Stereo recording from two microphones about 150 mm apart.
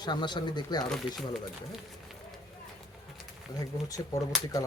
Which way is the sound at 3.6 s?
25° left (ahead or behind).